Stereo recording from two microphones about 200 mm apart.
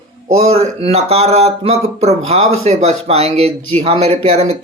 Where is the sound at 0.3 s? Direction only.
30° right (ahead or behind).